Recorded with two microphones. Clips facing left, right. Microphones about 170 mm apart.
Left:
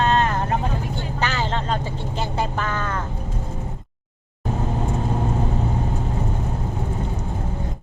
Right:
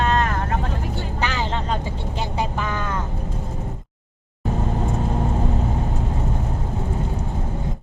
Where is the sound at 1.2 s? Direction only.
10° right (ahead or behind).